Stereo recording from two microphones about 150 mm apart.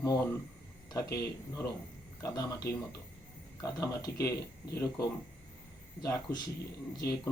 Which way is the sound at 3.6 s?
20° left (ahead or behind).